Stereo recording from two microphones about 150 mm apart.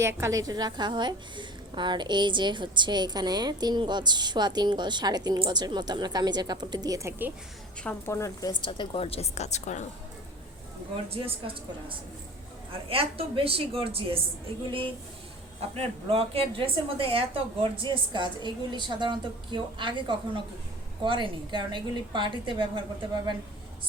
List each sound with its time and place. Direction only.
0.0 s a woman's voice: 20° right (ahead or behind)
7.9 s a woman's voice: 15° left (ahead or behind)
8.6 s a woman's voice: 35° left (ahead or behind)
11.1 s speech: 40° right (ahead or behind)
15.7 s speech: 40° right (ahead or behind)